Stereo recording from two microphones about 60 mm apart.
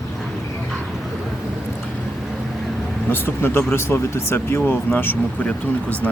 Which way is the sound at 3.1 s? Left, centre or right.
Left.